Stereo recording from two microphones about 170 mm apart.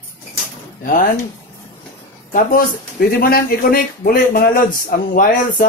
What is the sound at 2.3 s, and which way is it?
Speech, 55° left (ahead or behind).